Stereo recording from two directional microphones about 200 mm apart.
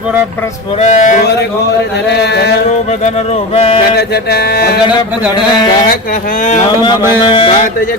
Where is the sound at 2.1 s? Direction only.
55° left (ahead or behind).